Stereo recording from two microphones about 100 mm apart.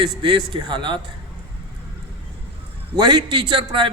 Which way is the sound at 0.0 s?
55° right (ahead or behind).